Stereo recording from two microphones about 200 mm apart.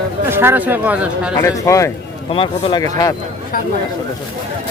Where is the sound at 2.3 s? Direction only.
25° left (ahead or behind).